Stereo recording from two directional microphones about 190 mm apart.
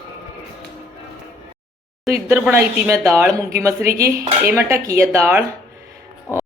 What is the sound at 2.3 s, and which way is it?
Speech, 10° right (ahead or behind).